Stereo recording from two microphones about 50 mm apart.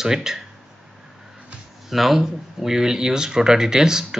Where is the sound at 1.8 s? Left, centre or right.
Centre.